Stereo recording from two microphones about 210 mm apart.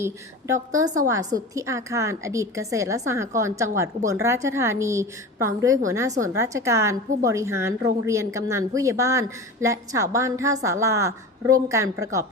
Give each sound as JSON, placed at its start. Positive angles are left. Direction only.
{"t": 0.0, "sound": "a woman's voice", "side_deg": -15}